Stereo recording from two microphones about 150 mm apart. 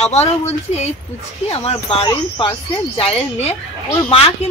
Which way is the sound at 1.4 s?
40° left (ahead or behind).